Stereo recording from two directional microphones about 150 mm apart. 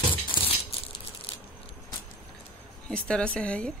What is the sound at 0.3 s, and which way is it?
Crushing, 35° left (ahead or behind).